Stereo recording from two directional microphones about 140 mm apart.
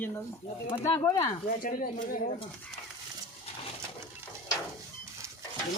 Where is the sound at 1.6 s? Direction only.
80° left.